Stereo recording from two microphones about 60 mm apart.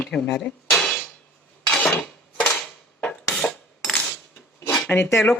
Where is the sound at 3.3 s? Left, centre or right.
Centre.